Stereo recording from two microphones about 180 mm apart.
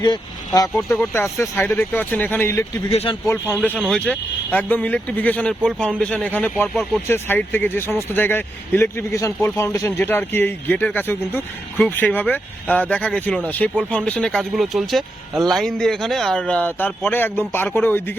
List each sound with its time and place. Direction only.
0.0 s speech: 20° left (ahead or behind)
2.9 s speech: 35° left (ahead or behind)
3.2 s speech: 15° left (ahead or behind)